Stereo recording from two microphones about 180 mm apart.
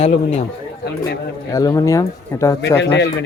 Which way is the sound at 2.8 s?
80° left.